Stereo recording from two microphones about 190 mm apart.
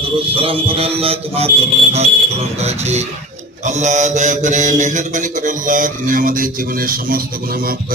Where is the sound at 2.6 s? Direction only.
35° right (ahead or behind).